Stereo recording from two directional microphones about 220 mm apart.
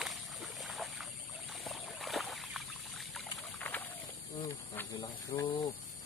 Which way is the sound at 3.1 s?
Centre (ahead or behind).